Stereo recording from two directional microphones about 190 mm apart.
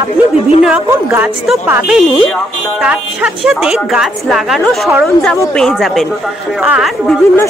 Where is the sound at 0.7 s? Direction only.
10° right (ahead or behind).